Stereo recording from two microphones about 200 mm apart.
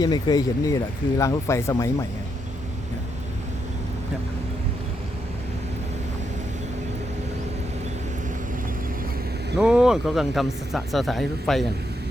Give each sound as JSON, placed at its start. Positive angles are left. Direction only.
{"t": 0.0, "sound": "speech", "side_deg": 20}
{"t": 9.6, "sound": "speech", "side_deg": -5}